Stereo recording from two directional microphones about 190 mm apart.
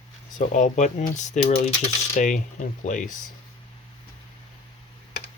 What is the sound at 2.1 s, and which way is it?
Speech, 40° left (ahead or behind).